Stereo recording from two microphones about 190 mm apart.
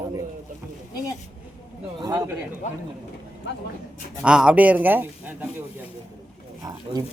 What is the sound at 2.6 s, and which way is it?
Speech, 40° left (ahead or behind).